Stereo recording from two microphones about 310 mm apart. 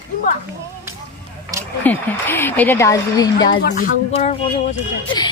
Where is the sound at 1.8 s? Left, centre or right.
Centre.